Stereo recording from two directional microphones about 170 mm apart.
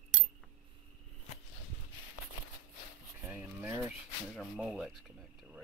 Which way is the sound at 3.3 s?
10° right (ahead or behind).